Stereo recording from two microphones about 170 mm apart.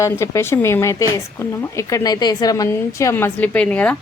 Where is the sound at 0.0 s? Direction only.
15° left (ahead or behind).